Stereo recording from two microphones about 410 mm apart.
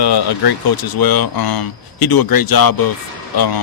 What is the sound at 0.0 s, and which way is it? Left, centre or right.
A man's voice, left.